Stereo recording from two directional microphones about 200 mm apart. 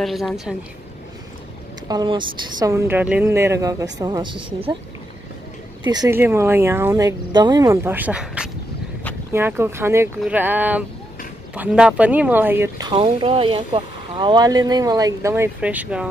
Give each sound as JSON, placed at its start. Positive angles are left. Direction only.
{"t": 0.0, "sound": "a woman's voice", "side_deg": 0}
{"t": 1.9, "sound": "speech", "side_deg": -20}
{"t": 5.9, "sound": "speech", "side_deg": -15}